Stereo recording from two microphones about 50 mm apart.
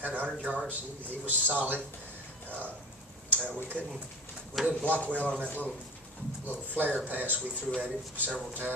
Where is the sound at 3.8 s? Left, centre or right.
Right.